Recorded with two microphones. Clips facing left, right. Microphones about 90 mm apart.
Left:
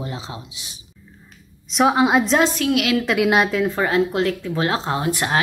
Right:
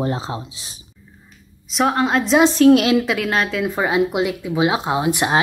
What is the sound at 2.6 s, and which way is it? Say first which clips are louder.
Speech: right 8 dB; 35° right (ahead or behind).